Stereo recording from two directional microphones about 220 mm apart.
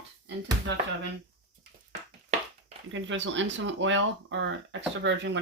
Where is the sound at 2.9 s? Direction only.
60° right (ahead or behind).